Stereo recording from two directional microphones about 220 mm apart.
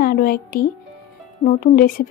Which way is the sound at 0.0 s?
40° left (ahead or behind).